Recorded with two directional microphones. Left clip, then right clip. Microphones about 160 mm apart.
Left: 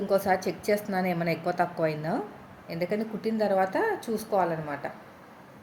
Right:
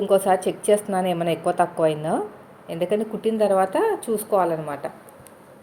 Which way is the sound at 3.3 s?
10° right (ahead or behind).